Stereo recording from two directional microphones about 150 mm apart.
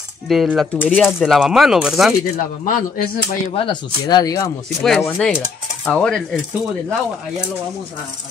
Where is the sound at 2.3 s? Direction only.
65° left (ahead or behind).